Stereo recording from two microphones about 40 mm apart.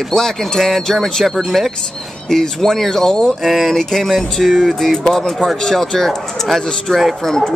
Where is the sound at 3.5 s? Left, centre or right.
Centre.